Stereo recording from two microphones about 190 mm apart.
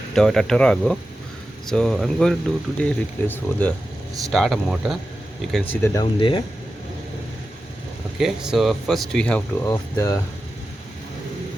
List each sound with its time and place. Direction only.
0.1 s speech: 5° left (ahead or behind)
5.8 s speech: 20° left (ahead or behind)
8.2 s speech: 5° right (ahead or behind)
9.6 s speech: 20° left (ahead or behind)